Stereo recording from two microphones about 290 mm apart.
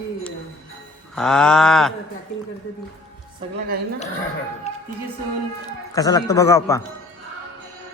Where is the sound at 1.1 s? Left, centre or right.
Centre.